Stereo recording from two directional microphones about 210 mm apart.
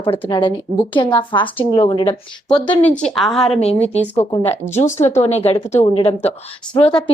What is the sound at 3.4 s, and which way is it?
A woman's voice, 30° left (ahead or behind).